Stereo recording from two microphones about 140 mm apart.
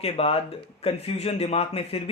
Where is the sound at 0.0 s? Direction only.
45° left (ahead or behind).